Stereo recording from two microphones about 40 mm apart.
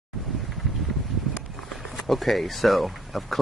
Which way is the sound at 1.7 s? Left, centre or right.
Centre.